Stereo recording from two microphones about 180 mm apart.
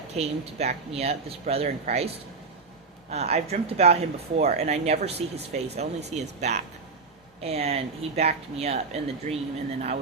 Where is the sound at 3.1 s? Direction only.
35° right (ahead or behind).